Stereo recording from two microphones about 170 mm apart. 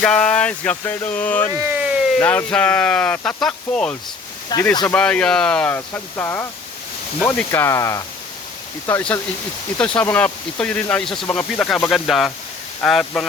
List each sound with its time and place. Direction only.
0.0 s speech: 5° left (ahead or behind)
1.5 s a sound: 10° right (ahead or behind)
2.1 s speech: 10° left (ahead or behind)
4.5 s speech: 25° left (ahead or behind)
4.9 s speech: 5° left (ahead or behind)